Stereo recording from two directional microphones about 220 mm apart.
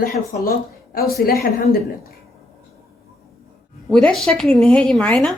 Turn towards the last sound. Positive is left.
turn(degrees=5)  # may be behind; listen again after turning